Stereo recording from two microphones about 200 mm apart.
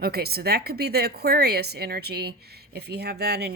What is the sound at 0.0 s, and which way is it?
A woman's voice, 50° right (ahead or behind).